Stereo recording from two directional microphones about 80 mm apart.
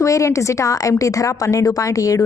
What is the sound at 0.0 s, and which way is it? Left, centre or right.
Speech, left.